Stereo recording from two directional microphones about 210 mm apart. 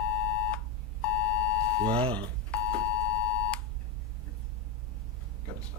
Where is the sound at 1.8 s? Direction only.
25° right (ahead or behind).